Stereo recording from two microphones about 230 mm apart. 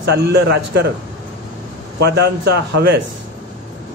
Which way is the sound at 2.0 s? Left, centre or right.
Right.